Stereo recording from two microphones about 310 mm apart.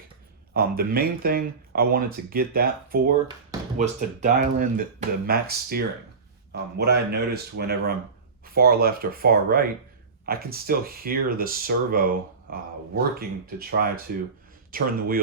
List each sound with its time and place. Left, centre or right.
0.5 s speech: right